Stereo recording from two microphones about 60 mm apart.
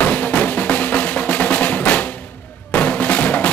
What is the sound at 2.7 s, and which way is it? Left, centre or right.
Drum, left.